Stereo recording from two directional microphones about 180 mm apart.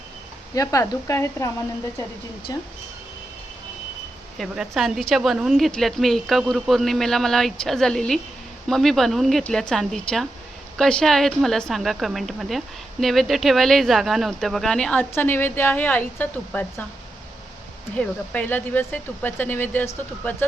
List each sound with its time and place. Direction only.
0.5 s speech: 20° left (ahead or behind)
2.5 s speech: 20° left (ahead or behind)
4.4 s a woman's voice: centre (ahead or behind)
17.9 s speech: 5° left (ahead or behind)